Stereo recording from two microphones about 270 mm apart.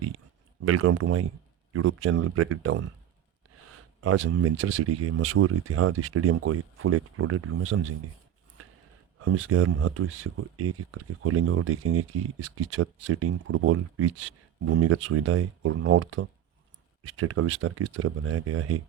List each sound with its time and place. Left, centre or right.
0.6 s speech: right
4.0 s speech: right
9.2 s speech: right